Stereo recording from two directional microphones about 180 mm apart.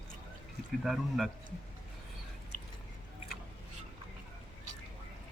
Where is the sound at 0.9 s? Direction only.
Centre (ahead or behind).